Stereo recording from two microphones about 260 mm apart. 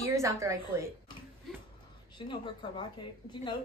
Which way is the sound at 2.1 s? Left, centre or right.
Centre.